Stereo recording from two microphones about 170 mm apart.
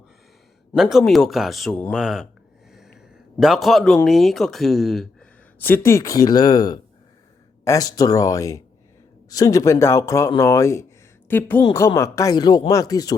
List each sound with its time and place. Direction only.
0.8 s speech: centre (ahead or behind)
3.3 s speech: centre (ahead or behind); by 13.1 s 20° left (ahead or behind)